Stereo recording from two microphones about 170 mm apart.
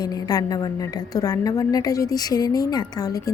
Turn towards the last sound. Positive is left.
turn(degrees=20)  # may be behind; listen again after turning